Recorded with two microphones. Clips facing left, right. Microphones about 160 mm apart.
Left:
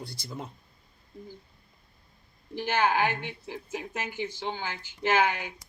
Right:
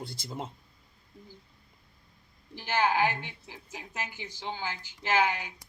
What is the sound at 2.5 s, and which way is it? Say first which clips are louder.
A woman's voice: left 1 dB; 60° left (ahead or behind).